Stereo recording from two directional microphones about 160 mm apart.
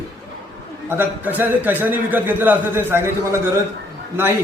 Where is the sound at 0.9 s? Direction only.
10° right (ahead or behind).